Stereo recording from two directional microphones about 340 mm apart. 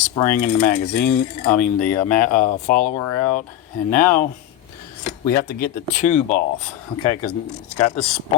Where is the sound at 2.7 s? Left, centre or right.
Left.